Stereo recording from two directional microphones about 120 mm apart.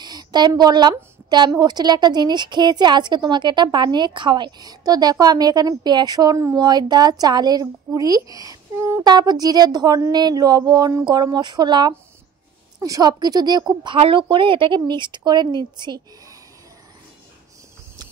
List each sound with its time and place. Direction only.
0.0 s a woman's voice: 35° right (ahead or behind)
9.0 s a woman's voice: 35° right (ahead or behind)
13.9 s a woman's voice: 50° right (ahead or behind)